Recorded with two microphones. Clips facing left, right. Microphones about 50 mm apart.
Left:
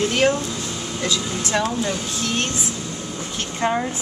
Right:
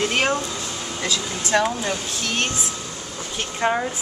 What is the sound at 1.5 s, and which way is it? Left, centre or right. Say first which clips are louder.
Speech: right 3 dB; centre.